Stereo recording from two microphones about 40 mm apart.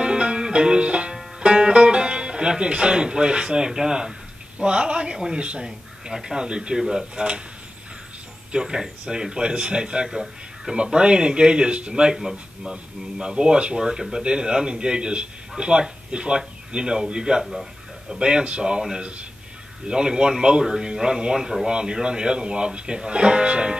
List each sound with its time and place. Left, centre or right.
0.0 s music: right
1.4 s speech: right
8.5 s speech: centre
10.0 s a man's voice: centre
10.7 s speech: centre